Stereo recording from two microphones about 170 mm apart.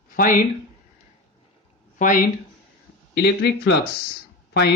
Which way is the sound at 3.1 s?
70° left (ahead or behind).